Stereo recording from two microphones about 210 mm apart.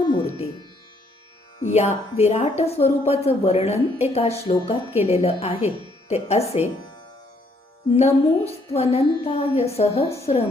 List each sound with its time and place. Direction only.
0.0 s music: 20° left (ahead or behind)
1.6 s speech: 30° left (ahead or behind)
7.9 s speech: 30° left (ahead or behind)